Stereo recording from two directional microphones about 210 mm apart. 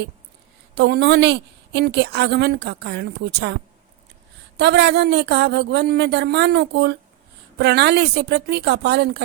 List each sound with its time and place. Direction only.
0.8 s a woman's voice: 50° right (ahead or behind)